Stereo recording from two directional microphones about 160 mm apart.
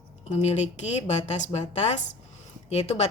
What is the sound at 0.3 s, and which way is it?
A woman's voice, 45° left (ahead or behind).